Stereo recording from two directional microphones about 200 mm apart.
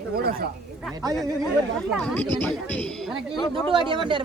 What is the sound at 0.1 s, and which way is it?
Speech, 50° right (ahead or behind).